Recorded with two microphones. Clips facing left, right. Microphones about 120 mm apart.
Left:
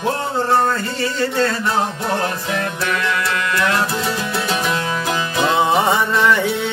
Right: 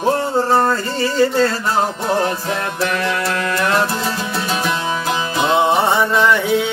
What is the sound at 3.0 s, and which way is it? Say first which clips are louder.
Music: right 1 dB; 35° right (ahead or behind).